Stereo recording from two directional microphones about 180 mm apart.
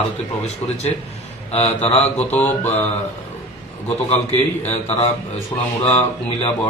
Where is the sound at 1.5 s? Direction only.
35° left (ahead or behind).